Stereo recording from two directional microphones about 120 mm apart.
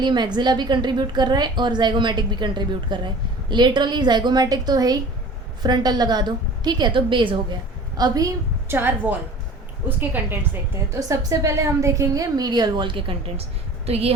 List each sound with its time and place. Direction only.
0.0 s a woman's voice: 40° right (ahead or behind)
7.9 s a woman's voice: 30° right (ahead or behind)
8.7 s a woman's voice: 15° right (ahead or behind); by 14.1 s 60° right (ahead or behind)